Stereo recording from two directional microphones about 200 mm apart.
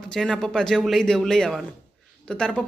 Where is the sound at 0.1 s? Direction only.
5° left (ahead or behind).